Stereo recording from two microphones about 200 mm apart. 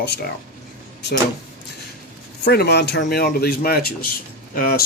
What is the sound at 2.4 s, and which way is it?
Speech, 55° left (ahead or behind).